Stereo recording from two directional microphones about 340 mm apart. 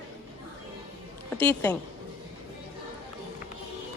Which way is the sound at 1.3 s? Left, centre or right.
Centre.